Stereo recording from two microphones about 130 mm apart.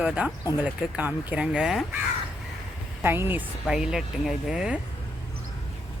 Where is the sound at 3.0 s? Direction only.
15° right (ahead or behind).